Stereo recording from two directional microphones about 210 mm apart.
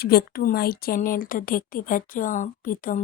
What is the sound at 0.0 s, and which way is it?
Speech, 50° left (ahead or behind).